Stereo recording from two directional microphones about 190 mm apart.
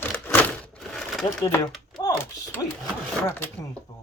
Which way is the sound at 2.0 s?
20° left (ahead or behind).